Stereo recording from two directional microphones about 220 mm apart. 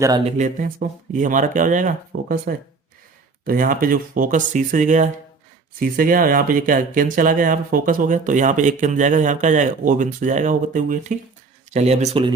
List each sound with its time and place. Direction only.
0.3 s speech: 35° right (ahead or behind)